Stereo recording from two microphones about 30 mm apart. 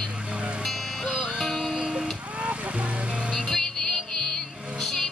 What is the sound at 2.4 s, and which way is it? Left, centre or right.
Vehicle, right.